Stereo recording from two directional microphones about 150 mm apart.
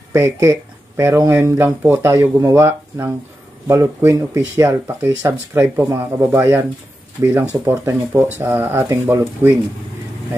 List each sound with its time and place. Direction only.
0.1 s speech: 20° right (ahead or behind)